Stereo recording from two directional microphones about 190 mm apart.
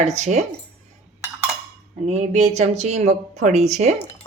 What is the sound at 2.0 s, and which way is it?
Speech, 35° right (ahead or behind).